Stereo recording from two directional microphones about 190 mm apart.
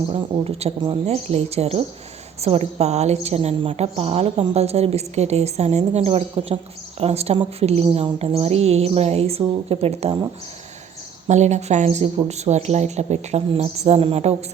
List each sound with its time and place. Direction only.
0.1 s a woman's voice: 30° right (ahead or behind)
11.3 s a woman's voice: 35° right (ahead or behind)